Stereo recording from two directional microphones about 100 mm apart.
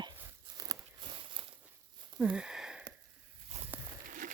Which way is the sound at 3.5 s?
90° right.